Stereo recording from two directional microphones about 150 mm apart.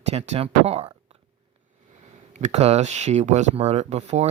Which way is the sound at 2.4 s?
45° right (ahead or behind).